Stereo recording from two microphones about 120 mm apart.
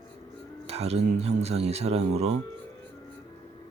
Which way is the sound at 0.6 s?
60° right (ahead or behind).